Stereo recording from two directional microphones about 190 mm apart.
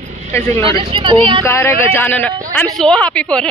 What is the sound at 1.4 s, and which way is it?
A man's voice, 15° left (ahead or behind).